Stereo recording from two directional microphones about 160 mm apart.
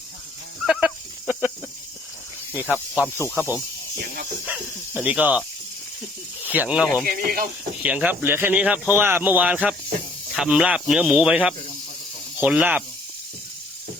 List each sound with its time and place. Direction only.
0.6 s fowl: 5° right (ahead or behind)
2.5 s cricket: 10° right (ahead or behind)
3.3 s speech: 10° right (ahead or behind)
6.4 s speech: 10° right (ahead or behind)
7.0 s speech: 65° right (ahead or behind)
7.8 s speech: 10° right (ahead or behind)